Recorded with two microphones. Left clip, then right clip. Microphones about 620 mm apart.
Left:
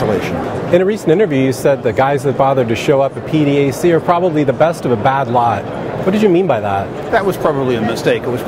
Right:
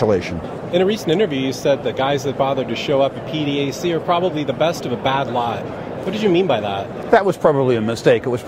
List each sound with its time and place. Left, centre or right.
0.7 s speech: left
7.1 s speech: right